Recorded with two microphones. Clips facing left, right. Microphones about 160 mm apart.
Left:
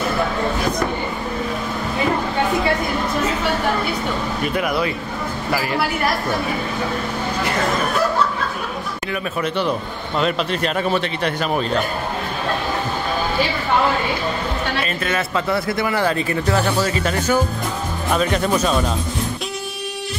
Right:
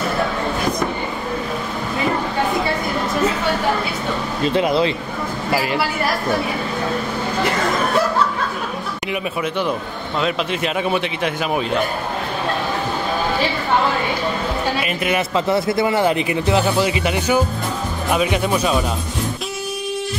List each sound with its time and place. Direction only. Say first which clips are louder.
4.4 s speech: right 6 dB; 25° right (ahead or behind)
9.1 s speech: even; 10° right (ahead or behind)
14.8 s speech: right 2 dB; 15° right (ahead or behind)